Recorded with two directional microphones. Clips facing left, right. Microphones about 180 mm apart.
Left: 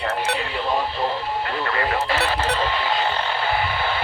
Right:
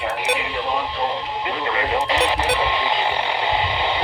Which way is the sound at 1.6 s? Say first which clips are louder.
Right 3 dB; 20° right (ahead or behind).